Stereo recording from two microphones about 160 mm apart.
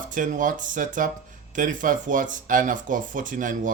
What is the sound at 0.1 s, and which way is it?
Speech, 55° right (ahead or behind).